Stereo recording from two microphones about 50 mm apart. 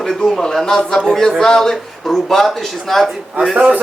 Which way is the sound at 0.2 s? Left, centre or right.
Centre.